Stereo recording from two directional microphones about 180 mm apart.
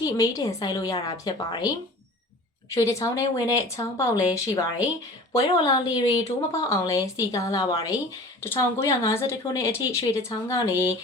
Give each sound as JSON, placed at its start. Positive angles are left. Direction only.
{"t": 0.0, "sound": "a woman's voice", "side_deg": 20}
{"t": 2.7, "sound": "a woman's voice", "side_deg": 15}
{"t": 5.9, "sound": "a woman's voice", "side_deg": 20}